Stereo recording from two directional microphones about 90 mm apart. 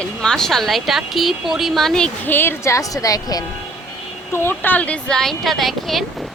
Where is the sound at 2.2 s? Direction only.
25° left (ahead or behind); by 3.4 s 45° left (ahead or behind).